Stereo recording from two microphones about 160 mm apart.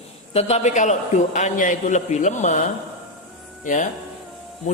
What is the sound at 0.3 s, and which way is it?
A man's voice, 40° left (ahead or behind).